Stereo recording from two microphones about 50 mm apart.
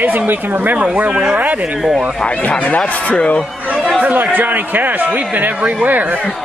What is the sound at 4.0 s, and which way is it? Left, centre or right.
Speech, right.